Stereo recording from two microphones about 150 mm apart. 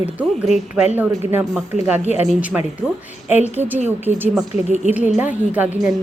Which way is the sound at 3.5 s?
10° right (ahead or behind).